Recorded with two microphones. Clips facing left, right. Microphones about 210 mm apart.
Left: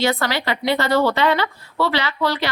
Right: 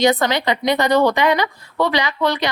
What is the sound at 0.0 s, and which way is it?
A woman's voice, 20° right (ahead or behind).